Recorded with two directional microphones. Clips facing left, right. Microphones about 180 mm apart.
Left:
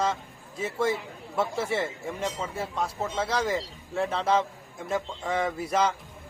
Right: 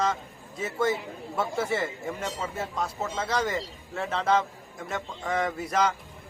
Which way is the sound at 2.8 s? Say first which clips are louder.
Left 2 dB; 5° left (ahead or behind).